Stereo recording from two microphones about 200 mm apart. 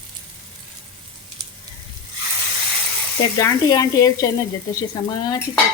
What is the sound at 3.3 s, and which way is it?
Speech, 15° left (ahead or behind).